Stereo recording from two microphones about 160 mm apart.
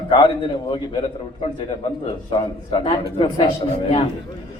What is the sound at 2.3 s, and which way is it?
Speech, 35° left (ahead or behind).